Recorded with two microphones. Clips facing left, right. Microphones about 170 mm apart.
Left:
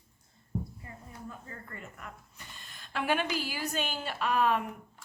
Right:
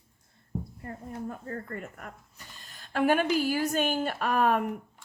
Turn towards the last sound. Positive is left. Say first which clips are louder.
# right 3 dB
turn(degrees=-50)  # may be behind; listen again after turning